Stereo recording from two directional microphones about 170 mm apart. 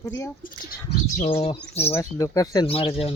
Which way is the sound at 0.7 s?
50° left (ahead or behind).